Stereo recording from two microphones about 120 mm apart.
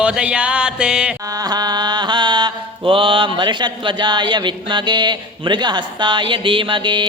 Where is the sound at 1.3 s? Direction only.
35° right (ahead or behind).